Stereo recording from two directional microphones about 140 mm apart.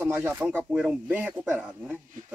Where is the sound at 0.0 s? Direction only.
15° right (ahead or behind).